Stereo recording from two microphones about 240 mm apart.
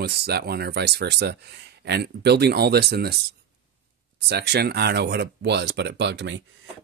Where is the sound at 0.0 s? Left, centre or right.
Right.